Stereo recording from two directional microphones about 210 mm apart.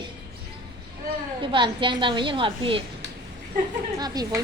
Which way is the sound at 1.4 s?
25° right (ahead or behind).